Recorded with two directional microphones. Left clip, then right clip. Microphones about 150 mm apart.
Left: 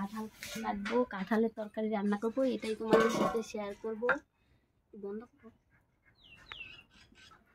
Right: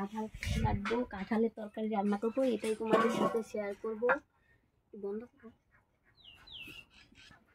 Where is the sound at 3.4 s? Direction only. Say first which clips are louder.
Right 1 dB; centre (ahead or behind).